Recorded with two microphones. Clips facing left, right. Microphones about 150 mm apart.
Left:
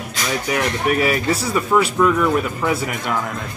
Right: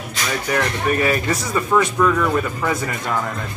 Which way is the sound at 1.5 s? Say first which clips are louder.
Even; 10° left (ahead or behind).